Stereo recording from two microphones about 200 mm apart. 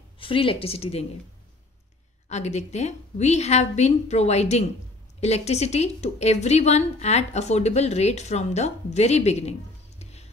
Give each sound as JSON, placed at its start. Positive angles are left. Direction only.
{"t": 0.2, "sound": "speech", "side_deg": 25}
{"t": 2.2, "sound": "a woman's voice", "side_deg": 35}